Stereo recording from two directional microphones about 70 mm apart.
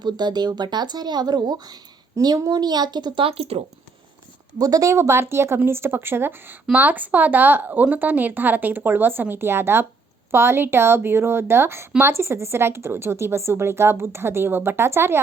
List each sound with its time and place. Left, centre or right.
0.0 s speech: right
4.5 s a woman's voice: right